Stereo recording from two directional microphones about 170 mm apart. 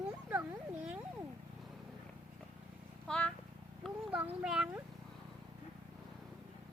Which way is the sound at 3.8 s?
5° right (ahead or behind).